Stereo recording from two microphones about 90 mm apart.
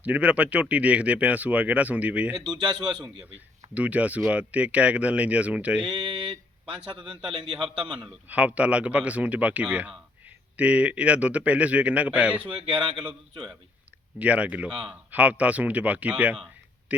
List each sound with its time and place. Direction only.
0.0 s speech: 15° right (ahead or behind)
2.5 s a man's voice: 55° right (ahead or behind)
3.8 s speech: 15° right (ahead or behind)
5.9 s a man's voice: 60° right (ahead or behind)
7.0 s speech: 10° right (ahead or behind)
7.3 s a man's voice: 70° right (ahead or behind)
7.9 s a man's voice: centre (ahead or behind)
8.3 s speech: 15° right (ahead or behind)
12.5 s a man's voice: 65° right (ahead or behind)
14.2 s speech: 15° right (ahead or behind)